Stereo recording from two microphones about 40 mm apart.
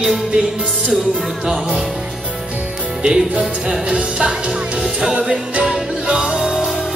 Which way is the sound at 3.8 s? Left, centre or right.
Right.